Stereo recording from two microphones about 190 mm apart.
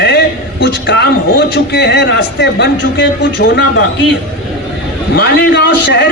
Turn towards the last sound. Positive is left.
turn(degrees=60)  # may be behind; listen again after turning